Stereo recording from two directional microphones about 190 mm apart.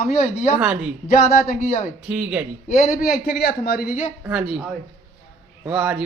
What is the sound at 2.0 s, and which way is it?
Speech, 5° right (ahead or behind).